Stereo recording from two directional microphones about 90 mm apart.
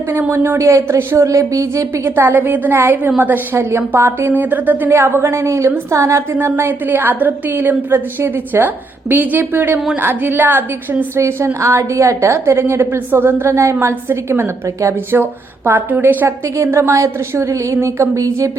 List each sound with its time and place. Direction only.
0.1 s a woman's voice: 25° right (ahead or behind)
2.0 s a woman's voice: 25° right (ahead or behind)
6.3 s a woman's voice: 25° right (ahead or behind)